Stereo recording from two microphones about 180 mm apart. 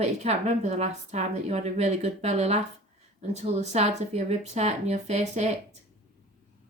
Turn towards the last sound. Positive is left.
turn(degrees=-35)  # may be behind; listen again after turning